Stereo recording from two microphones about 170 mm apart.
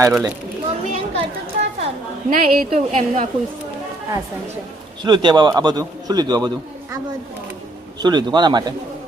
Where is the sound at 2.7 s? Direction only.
40° right (ahead or behind).